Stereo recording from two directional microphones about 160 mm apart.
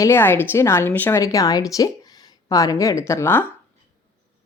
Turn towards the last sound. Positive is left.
turn(degrees=15)  # may be behind; listen again after turning